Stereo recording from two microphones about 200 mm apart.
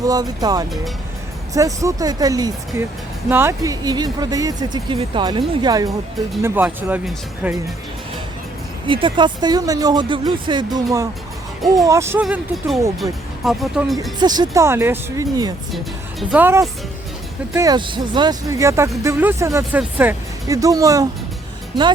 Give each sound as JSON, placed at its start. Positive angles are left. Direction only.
{"t": 0.0, "sound": "speech", "side_deg": -20}
{"t": 8.9, "sound": "speech", "side_deg": -25}
{"t": 11.9, "sound": "speech", "side_deg": -15}
{"t": 12.2, "sound": "speech", "side_deg": 0}
{"t": 14.2, "sound": "speech", "side_deg": -20}